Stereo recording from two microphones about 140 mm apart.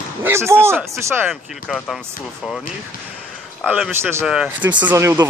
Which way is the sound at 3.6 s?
10° right (ahead or behind).